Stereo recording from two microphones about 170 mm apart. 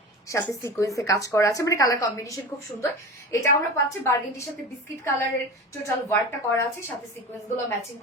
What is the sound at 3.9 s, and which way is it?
Speech, 20° left (ahead or behind).